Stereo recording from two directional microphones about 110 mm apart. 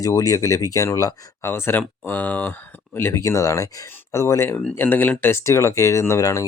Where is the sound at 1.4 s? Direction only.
20° left (ahead or behind).